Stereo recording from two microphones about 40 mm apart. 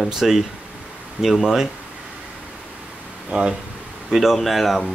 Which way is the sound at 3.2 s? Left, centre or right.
Centre.